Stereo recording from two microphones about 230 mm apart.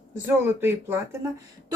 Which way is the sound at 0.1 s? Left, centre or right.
Centre.